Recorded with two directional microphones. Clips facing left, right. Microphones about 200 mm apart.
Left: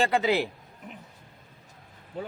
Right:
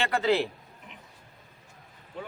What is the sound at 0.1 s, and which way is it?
Speech, 10° left (ahead or behind).